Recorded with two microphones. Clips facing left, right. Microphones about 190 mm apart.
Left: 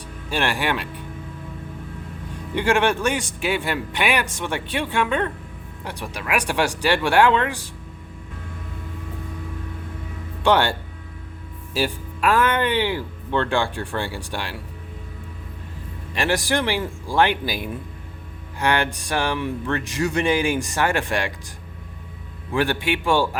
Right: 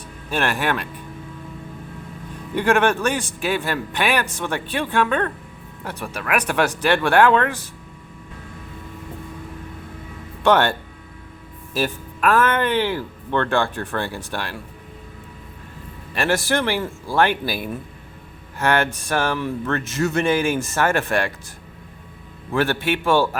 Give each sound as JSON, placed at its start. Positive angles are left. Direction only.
{"t": 0.3, "sound": "speech", "side_deg": 15}
{"t": 2.6, "sound": "speech", "side_deg": 15}
{"t": 10.4, "sound": "speech", "side_deg": 15}
{"t": 12.4, "sound": "speech", "side_deg": -50}
{"t": 12.6, "sound": "speech", "side_deg": 15}
{"t": 16.1, "sound": "speech", "side_deg": 15}
{"t": 22.5, "sound": "speech", "side_deg": 15}